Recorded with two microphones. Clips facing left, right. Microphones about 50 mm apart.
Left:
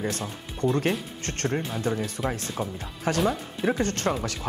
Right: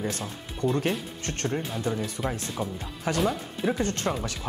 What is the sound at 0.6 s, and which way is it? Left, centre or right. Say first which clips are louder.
Speech: left 1 dB; left.